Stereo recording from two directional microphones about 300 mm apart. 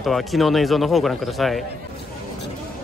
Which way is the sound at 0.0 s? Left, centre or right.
Centre.